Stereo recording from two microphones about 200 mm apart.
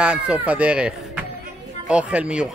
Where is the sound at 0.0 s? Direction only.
5° right (ahead or behind).